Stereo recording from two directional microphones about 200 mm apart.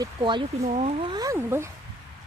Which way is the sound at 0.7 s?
35° right (ahead or behind).